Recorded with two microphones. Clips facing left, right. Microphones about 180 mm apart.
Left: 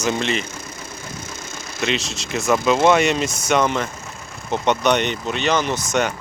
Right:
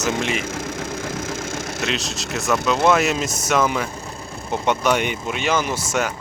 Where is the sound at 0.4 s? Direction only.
90° right.